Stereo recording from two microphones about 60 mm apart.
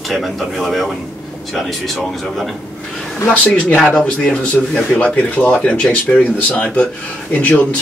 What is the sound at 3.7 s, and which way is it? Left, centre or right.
Speech, centre.